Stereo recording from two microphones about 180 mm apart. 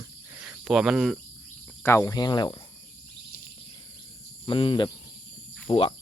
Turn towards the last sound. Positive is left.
turn(degrees=25)  # may be behind; listen again after turning